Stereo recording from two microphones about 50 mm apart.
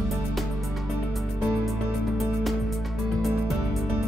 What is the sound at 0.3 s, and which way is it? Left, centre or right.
Music, centre.